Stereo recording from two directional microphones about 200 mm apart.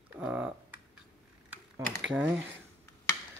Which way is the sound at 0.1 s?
10° right (ahead or behind).